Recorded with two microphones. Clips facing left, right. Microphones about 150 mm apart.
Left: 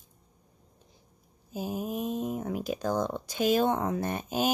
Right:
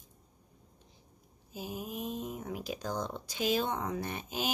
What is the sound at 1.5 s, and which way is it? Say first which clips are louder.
Speech: left 7 dB; 45° left (ahead or behind).